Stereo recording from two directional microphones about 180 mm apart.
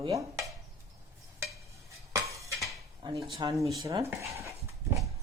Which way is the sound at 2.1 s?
15° right (ahead or behind).